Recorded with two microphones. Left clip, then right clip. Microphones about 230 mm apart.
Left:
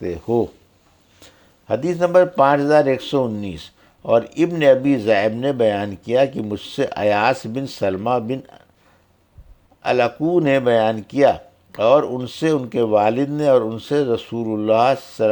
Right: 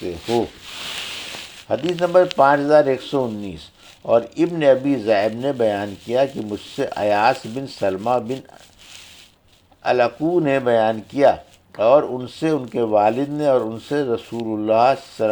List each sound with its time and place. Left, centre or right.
0.0 s speech: left
1.6 s speech: left
9.8 s speech: left